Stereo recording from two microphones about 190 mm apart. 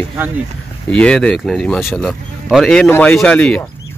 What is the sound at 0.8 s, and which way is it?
Speech, 5° left (ahead or behind).